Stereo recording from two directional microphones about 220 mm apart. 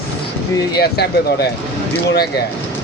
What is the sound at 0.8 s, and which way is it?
Speech, 45° left (ahead or behind).